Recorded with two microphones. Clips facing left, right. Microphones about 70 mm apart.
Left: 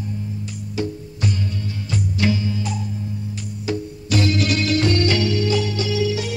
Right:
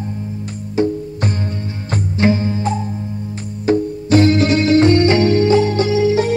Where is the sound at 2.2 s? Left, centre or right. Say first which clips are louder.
Right 7 dB; right.